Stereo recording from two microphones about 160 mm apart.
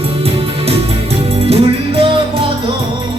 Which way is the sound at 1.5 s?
35° right (ahead or behind).